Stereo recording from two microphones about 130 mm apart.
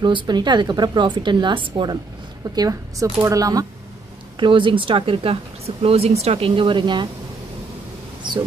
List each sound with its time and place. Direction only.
0.0 s a woman's voice: 35° right (ahead or behind)
4.4 s speech: 40° right (ahead or behind)